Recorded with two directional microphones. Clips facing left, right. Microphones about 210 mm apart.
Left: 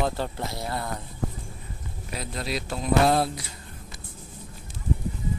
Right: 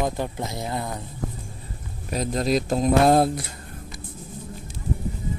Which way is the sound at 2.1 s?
40° right (ahead or behind).